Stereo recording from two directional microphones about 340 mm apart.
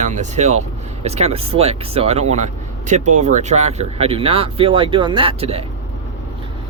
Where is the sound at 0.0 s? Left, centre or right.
Right.